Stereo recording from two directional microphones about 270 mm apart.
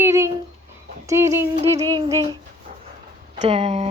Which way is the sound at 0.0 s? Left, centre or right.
Centre.